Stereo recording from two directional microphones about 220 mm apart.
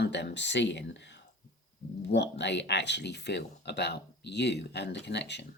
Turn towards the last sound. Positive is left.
turn(degrees=50)  # may be behind; listen again after turning